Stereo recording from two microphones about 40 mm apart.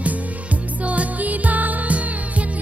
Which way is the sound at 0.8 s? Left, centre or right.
Right.